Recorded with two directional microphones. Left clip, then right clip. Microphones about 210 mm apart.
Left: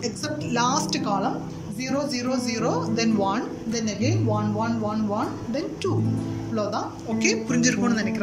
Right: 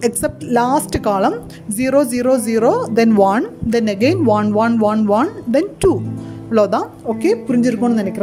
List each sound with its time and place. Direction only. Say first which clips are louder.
0.0 s a woman's voice: right 10 dB; 45° right (ahead or behind)